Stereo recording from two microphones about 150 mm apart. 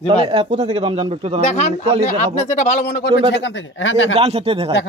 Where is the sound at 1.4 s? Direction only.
50° left (ahead or behind).